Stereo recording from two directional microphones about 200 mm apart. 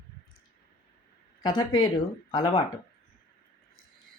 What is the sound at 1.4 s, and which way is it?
Speech, 20° left (ahead or behind).